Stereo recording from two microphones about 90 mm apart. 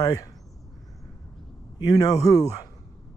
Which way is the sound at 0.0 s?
45° left (ahead or behind).